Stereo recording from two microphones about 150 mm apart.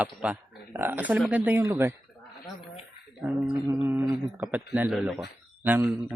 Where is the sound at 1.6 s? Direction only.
20° right (ahead or behind).